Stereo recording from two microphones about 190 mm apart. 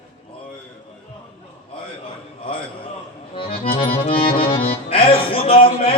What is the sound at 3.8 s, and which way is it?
Accordion, 30° left (ahead or behind).